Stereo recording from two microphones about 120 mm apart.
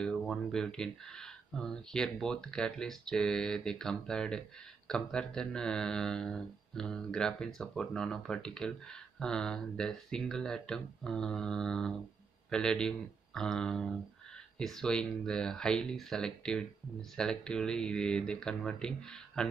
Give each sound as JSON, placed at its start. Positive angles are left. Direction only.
{"t": 0.0, "sound": "speech", "side_deg": 5}